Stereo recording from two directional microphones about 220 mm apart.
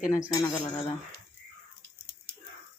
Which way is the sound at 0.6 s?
20° left (ahead or behind).